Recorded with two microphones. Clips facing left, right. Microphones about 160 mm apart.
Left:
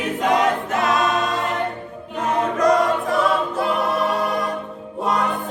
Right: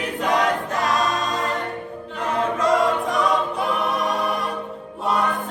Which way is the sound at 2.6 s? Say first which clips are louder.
Left 2 dB; 20° right (ahead or behind).